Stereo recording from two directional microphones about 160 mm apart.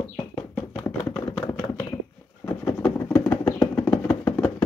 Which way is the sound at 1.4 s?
15° left (ahead or behind).